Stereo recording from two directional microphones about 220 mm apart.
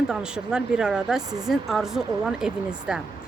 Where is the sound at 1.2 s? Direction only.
15° right (ahead or behind).